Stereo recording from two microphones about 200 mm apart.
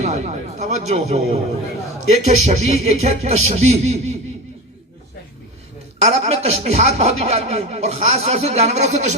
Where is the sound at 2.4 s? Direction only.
30° right (ahead or behind).